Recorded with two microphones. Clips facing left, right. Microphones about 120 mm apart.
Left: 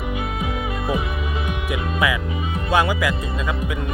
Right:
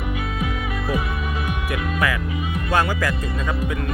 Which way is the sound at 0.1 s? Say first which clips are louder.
Even; 20° left (ahead or behind).